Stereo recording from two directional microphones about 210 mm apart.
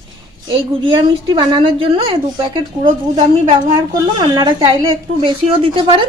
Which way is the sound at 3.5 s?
25° right (ahead or behind).